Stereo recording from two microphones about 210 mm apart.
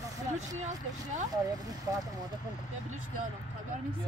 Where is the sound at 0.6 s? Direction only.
35° right (ahead or behind).